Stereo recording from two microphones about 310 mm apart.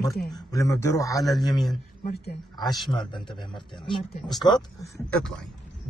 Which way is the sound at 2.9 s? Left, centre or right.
Centre.